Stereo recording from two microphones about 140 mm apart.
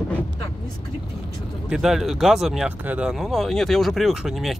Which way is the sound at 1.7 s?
5° right (ahead or behind).